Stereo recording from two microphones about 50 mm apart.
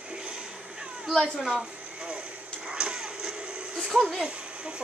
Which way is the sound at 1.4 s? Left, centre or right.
Centre.